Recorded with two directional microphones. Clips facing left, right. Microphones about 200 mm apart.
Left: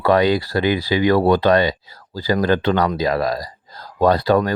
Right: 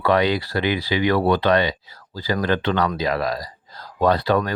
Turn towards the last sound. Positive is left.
turn(degrees=40)  # may be behind; listen again after turning